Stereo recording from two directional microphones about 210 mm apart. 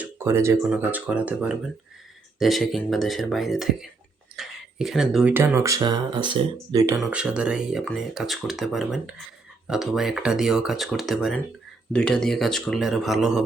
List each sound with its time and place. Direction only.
0.0 s speech: 10° right (ahead or behind)
7.0 s speech: 5° right (ahead or behind)